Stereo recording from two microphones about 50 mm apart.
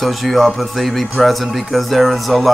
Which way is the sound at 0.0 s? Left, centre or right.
Centre.